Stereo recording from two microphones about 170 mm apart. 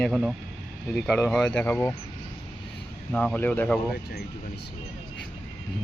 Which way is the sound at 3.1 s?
5° left (ahead or behind).